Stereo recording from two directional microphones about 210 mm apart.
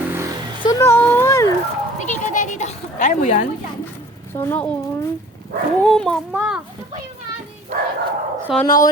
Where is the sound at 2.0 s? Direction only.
35° left (ahead or behind).